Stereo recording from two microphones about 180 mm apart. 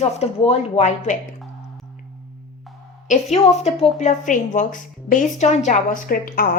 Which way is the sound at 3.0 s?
40° left (ahead or behind).